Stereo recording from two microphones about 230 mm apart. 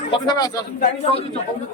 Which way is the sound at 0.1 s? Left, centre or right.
Centre.